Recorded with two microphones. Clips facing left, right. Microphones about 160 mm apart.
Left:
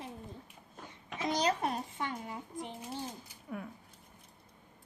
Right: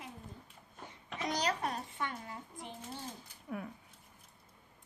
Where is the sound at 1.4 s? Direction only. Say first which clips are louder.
Left 4 dB; 25° left (ahead or behind).